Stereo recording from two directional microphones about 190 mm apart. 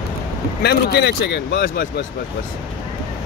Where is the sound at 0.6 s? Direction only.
60° left (ahead or behind).